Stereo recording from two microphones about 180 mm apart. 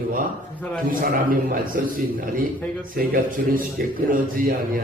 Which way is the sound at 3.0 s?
55° right (ahead or behind).